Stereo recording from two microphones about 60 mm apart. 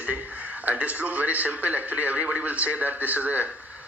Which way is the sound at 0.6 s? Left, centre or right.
Right.